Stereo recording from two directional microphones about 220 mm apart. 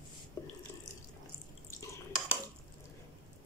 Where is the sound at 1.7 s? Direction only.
15° left (ahead or behind).